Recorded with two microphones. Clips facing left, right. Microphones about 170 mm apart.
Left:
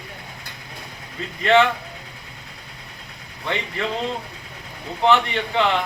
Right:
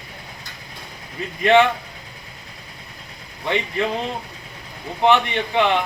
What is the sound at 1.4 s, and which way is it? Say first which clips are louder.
Speech: right 2 dB; 15° right (ahead or behind).